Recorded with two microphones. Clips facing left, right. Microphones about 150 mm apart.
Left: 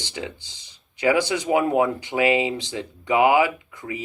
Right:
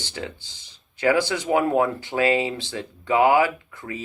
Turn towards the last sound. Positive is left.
turn(degrees=20)  # may be behind; listen again after turning